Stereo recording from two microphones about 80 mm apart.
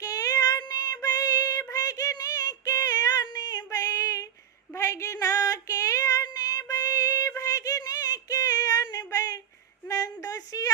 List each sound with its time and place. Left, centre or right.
0.0 s female singing: left
1.7 s child singing: left
3.3 s female singing: left
9.9 s a sound: left